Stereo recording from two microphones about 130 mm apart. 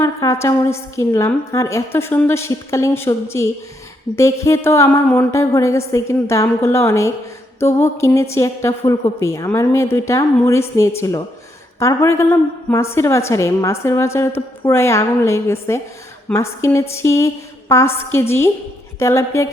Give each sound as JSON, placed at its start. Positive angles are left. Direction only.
{"t": 0.0, "sound": "a woman's voice", "side_deg": 25}